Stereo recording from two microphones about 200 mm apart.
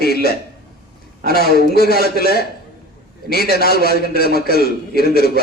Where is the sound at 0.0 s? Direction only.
50° left (ahead or behind).